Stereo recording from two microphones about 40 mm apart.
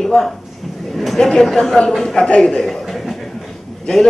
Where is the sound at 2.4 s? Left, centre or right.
Centre.